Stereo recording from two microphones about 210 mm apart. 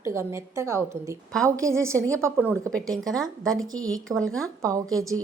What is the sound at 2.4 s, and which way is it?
A woman's voice, 5° left (ahead or behind).